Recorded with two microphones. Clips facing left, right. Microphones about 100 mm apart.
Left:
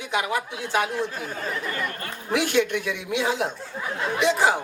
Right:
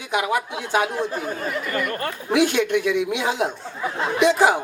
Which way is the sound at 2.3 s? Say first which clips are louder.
Right 3 dB; 20° right (ahead or behind).